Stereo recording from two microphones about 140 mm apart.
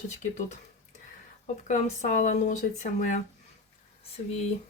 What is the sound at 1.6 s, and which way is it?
Speech, 65° left (ahead or behind).